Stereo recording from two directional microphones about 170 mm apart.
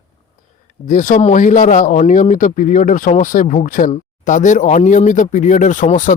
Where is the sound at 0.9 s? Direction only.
50° left (ahead or behind).